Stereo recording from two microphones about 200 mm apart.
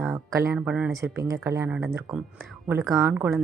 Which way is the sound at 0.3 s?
15° right (ahead or behind).